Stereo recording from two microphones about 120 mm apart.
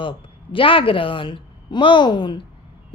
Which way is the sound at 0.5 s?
45° left (ahead or behind).